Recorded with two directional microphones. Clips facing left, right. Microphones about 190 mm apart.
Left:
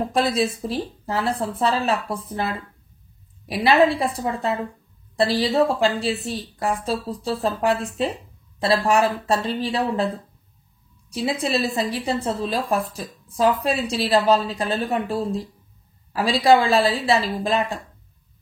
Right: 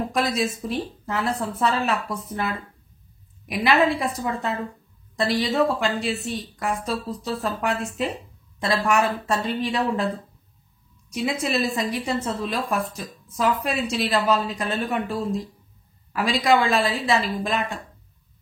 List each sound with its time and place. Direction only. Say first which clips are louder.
0.1 s speech: left 3 dB; 30° left (ahead or behind)
11.1 s speech: left 2 dB; 35° left (ahead or behind)